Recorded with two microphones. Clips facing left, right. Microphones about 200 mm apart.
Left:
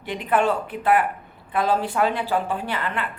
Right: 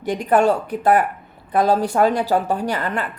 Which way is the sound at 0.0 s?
40° right (ahead or behind).